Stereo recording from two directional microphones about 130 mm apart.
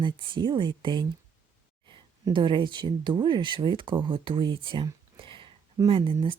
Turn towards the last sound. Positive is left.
turn(degrees=-45)  # may be behind; listen again after turning